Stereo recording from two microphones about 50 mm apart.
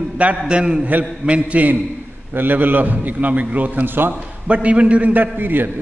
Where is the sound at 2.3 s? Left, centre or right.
Right.